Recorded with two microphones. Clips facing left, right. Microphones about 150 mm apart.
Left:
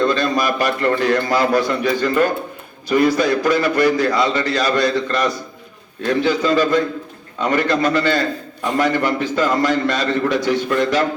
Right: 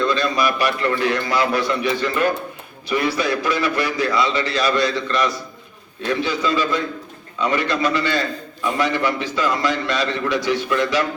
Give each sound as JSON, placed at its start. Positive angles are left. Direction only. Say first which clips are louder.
{"t": 0.0, "sound": "a man's voice", "louder": "left 2 dB", "side_deg": 45}